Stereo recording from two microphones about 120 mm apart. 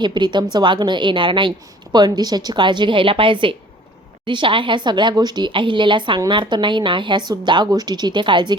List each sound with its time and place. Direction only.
0.0 s a woman's voice: 40° right (ahead or behind)